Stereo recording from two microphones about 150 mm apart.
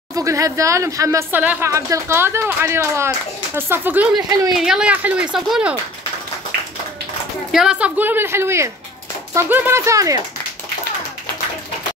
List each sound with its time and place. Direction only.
0.1 s speech: 20° right (ahead or behind)
4.2 s speech: 25° right (ahead or behind)
4.6 s speech: 5° right (ahead or behind)
7.5 s speech: 5° right (ahead or behind); by 10.2 s 20° right (ahead or behind)